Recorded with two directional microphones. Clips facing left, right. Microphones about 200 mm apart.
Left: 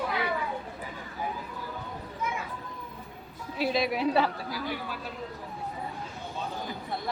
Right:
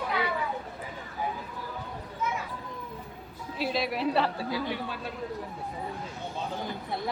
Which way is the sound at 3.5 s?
Centre (ahead or behind).